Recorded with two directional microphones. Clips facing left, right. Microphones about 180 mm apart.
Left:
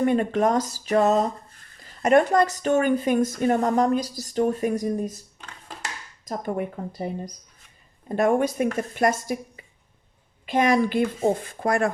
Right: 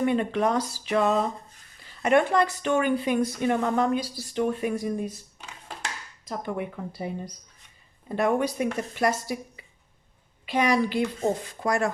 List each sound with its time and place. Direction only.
0.0 s speech: 45° left (ahead or behind)
6.2 s a woman's voice: 45° left (ahead or behind)